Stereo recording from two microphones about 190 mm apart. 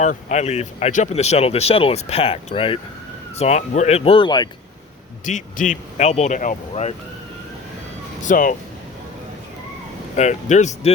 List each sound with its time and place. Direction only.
0.0 s speech: 40° left (ahead or behind); by 4.4 s 25° left (ahead or behind)
5.2 s speech: 40° left (ahead or behind)
8.2 s speech: 45° left (ahead or behind)
10.2 s speech: 40° left (ahead or behind)